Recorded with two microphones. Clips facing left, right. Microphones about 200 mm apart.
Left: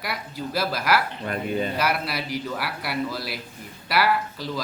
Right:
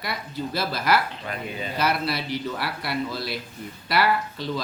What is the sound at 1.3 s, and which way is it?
Speech, 45° left (ahead or behind).